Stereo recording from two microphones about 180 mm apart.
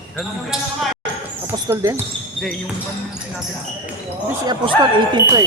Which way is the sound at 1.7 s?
15° right (ahead or behind).